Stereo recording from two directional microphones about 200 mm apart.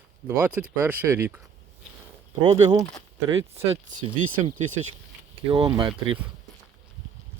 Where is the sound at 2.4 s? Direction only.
20° right (ahead or behind).